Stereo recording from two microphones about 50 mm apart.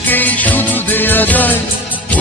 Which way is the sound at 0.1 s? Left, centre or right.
Left.